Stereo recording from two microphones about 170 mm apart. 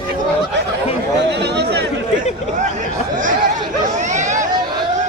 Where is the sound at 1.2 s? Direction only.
85° right.